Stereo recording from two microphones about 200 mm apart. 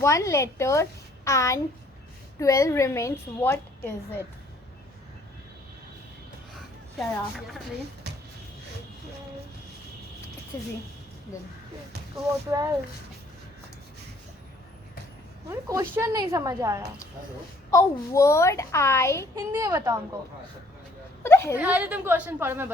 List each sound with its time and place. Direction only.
0.0 s a child's voice: 15° left (ahead or behind)
6.5 s a sound: centre (ahead or behind)
10.5 s a woman's voice: 20° left (ahead or behind)
12.5 s a woman's voice: 15° right (ahead or behind)
15.4 s a woman's voice: 15° right (ahead or behind)
17.7 s a child's voice: 15° left (ahead or behind)
19.5 s a woman's voice: 15° right (ahead or behind)
21.2 s a sound: 15° left (ahead or behind)
21.5 s a woman's voice: 5° right (ahead or behind)